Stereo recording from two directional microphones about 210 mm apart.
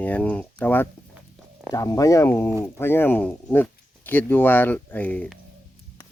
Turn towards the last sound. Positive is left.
turn(degrees=5)  # may be behind; listen again after turning